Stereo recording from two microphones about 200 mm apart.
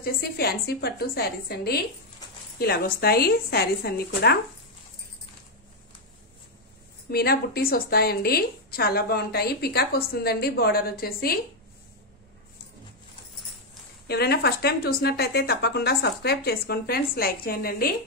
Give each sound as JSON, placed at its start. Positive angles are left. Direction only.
{"t": 0.0, "sound": "a woman's voice", "side_deg": 50}
{"t": 7.1, "sound": "a woman's voice", "side_deg": 50}
{"t": 14.0, "sound": "a woman's voice", "side_deg": 55}